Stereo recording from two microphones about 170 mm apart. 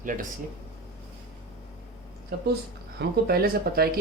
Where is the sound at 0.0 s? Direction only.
50° right (ahead or behind).